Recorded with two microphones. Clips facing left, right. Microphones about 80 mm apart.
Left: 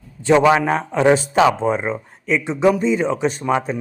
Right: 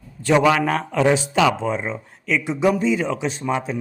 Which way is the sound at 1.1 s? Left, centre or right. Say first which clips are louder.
Left 3 dB; left.